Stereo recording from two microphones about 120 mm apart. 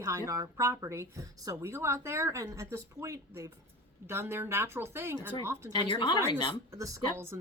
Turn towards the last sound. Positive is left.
turn(degrees=-20)  # may be behind; listen again after turning